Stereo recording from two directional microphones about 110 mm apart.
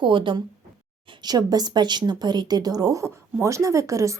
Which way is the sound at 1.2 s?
35° right (ahead or behind).